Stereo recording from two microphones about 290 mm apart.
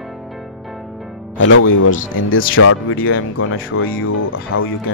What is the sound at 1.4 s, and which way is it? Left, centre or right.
Speech, left.